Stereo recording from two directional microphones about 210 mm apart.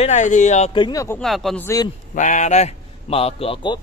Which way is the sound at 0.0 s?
35° left (ahead or behind).